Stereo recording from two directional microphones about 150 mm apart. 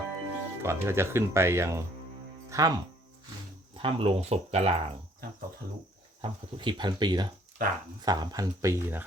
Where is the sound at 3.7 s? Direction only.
35° right (ahead or behind).